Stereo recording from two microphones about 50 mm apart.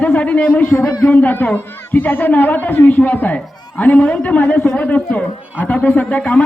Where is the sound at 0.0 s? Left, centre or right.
Left.